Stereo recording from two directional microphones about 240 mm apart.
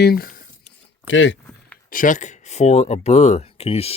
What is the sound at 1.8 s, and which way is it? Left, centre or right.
Speech, left.